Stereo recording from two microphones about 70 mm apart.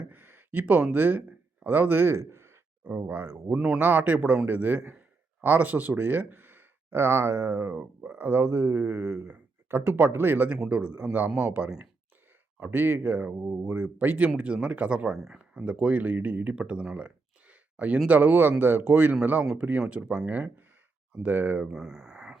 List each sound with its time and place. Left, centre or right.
0.0 s a sound: right
1.6 s speech: right
3.8 s a man's voice: right
12.5 s speech: right
14.3 s speech: centre
15.1 s speech: centre
17.5 s a sound: centre
18.1 s speech: right
21.6 s speech: centre